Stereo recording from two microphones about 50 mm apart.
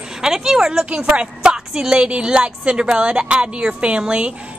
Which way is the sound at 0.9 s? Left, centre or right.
Right.